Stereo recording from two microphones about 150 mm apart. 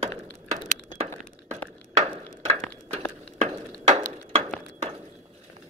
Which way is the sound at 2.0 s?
45° right (ahead or behind).